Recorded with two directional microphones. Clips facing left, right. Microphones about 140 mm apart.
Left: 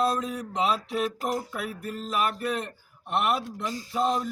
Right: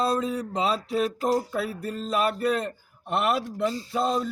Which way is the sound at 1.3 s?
30° right (ahead or behind).